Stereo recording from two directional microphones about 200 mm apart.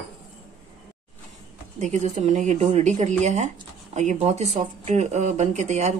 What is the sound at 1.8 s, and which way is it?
Speech, 35° right (ahead or behind).